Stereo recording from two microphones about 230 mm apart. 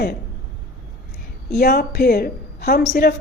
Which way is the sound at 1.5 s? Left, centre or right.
Left.